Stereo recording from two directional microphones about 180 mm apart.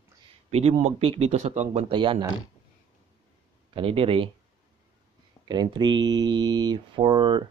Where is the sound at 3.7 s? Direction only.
30° right (ahead or behind).